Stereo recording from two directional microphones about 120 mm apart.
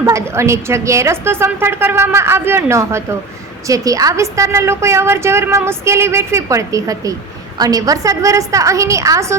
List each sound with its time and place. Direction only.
0.0 s a woman's voice: 25° right (ahead or behind)